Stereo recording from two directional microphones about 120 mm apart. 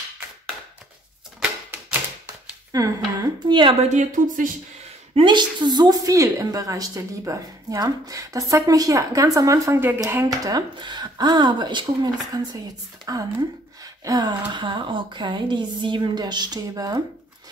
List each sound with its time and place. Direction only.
1.4 s typewriter: 10° right (ahead or behind)
2.7 s a woman's voice: 30° right (ahead or behind)
3.9 s speech: 90° right
5.2 s a woman's voice: 40° right (ahead or behind)
14.0 s a woman's voice: 35° right (ahead or behind)